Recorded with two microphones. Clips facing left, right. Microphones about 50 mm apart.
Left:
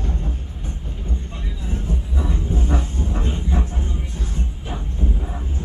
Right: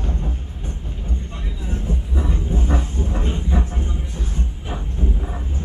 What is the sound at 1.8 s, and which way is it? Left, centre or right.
Music, centre.